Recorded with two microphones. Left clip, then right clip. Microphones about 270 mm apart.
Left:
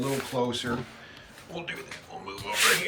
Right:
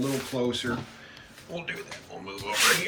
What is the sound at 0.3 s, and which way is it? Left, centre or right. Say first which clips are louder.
Speech: even; centre.